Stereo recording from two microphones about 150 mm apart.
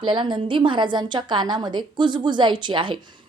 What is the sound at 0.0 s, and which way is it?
A woman's voice, 30° right (ahead or behind).